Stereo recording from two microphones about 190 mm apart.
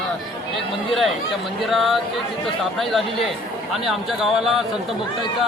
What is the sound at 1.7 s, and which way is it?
Speech, centre (ahead or behind).